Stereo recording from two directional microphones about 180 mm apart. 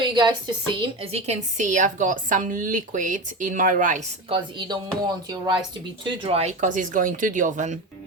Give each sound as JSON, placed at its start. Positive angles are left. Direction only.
{"t": 0.0, "sound": "a woman's voice", "side_deg": -25}
{"t": 4.3, "sound": "a woman's voice", "side_deg": -25}